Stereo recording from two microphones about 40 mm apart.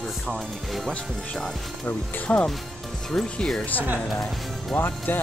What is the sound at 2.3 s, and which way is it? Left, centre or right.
Speech, left.